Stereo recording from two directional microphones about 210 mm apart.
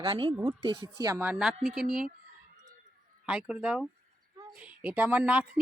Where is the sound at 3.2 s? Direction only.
5° right (ahead or behind).